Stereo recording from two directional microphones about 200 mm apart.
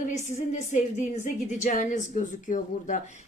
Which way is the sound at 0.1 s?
35° left (ahead or behind).